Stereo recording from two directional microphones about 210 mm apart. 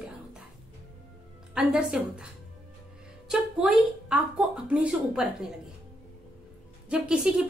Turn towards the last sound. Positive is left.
turn(degrees=-5)  # may be behind; listen again after turning